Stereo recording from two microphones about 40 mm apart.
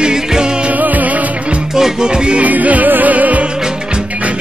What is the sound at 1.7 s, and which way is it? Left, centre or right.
Music, centre.